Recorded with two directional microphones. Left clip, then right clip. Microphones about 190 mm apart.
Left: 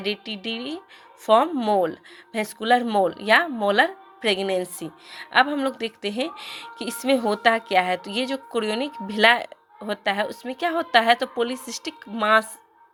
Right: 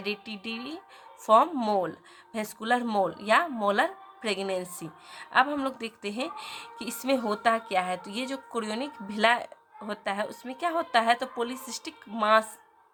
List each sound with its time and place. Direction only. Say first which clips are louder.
0.0 s speech: left 6 dB; 15° left (ahead or behind)